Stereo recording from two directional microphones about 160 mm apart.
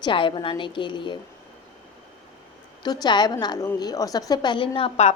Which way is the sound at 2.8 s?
25° left (ahead or behind).